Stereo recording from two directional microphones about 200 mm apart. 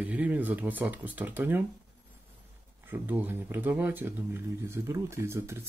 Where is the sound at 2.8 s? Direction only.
10° right (ahead or behind).